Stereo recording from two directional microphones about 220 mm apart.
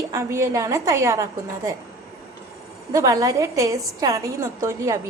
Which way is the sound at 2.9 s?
15° right (ahead or behind).